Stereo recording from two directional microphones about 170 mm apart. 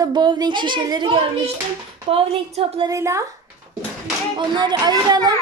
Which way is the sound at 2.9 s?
15° right (ahead or behind).